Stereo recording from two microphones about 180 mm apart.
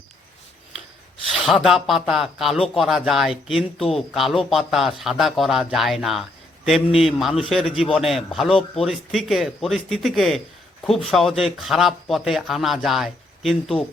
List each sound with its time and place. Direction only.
1.3 s speech: centre (ahead or behind)
8.5 s speech: 35° left (ahead or behind)
8.9 s speech: centre (ahead or behind)